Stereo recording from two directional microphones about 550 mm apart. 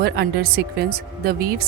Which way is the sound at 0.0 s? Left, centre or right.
Centre.